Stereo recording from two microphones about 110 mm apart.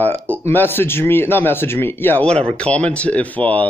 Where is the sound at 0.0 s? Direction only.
15° left (ahead or behind).